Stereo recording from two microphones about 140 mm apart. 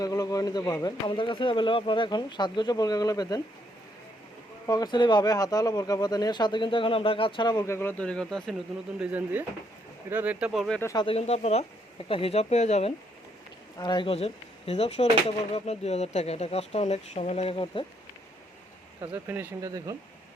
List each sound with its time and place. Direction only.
0.0 s speech: 25° left (ahead or behind)
4.6 s speech: 30° left (ahead or behind); by 8.5 s 5° left (ahead or behind)
9.0 s speech: 10° right (ahead or behind)
10.9 s speech: 40° left (ahead or behind)
13.7 s speech: 30° left (ahead or behind)
19.1 s speech: 15° right (ahead or behind)